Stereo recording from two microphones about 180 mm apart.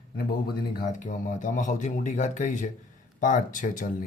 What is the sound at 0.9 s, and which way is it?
Speech, 45° left (ahead or behind).